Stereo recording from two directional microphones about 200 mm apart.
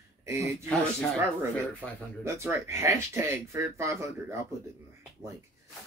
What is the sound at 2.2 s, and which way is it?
Speech, 15° right (ahead or behind).